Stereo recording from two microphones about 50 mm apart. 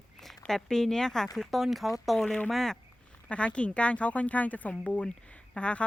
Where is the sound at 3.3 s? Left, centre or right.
Left.